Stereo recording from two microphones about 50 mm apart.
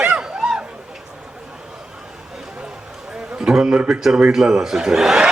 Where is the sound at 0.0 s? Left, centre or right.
Right.